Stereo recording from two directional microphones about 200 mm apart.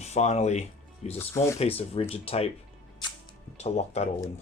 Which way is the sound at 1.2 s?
15° left (ahead or behind).